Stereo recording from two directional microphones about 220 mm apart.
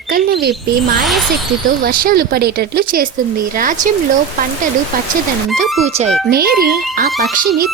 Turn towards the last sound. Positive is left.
turn(degrees=-45)  # may be behind; listen again after turning